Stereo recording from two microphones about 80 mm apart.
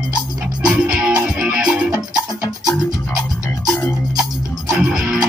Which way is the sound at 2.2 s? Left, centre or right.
Left.